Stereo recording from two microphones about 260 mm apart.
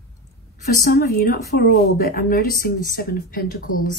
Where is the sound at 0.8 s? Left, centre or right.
Left.